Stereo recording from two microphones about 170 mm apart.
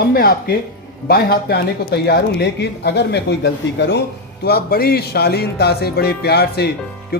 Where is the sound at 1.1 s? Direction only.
70° left (ahead or behind).